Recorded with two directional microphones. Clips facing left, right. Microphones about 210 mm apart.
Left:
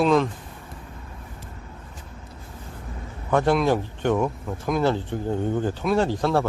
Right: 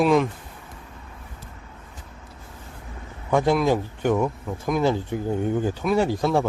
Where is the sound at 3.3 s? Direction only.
10° right (ahead or behind).